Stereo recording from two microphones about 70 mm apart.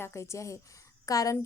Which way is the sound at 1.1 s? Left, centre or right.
Left.